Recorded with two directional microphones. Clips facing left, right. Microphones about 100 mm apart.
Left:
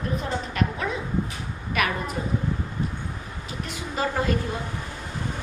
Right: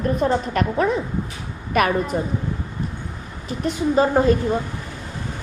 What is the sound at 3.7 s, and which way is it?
Speech, 30° right (ahead or behind).